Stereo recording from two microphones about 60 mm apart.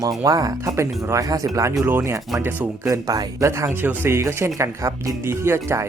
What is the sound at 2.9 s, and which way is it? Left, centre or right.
Speech, right.